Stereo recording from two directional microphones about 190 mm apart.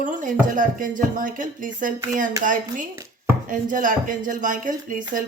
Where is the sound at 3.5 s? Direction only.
45° right (ahead or behind).